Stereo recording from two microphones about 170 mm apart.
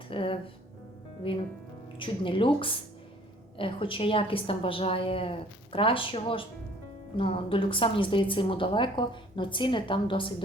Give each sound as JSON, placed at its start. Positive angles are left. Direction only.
{"t": 0.1, "sound": "a woman's voice", "side_deg": 30}